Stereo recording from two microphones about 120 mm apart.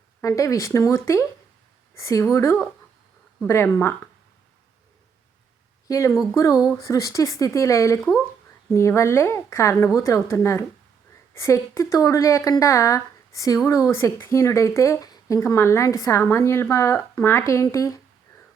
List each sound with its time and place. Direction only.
0.2 s speech: 25° left (ahead or behind)
5.9 s speech: 25° left (ahead or behind)